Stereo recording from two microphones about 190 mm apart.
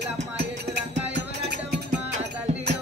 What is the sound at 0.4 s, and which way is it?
Music, 65° right (ahead or behind).